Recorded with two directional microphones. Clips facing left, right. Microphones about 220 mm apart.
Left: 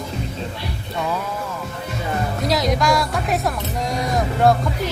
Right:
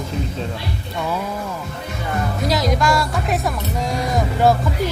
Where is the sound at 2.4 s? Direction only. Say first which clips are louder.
Even; centre (ahead or behind).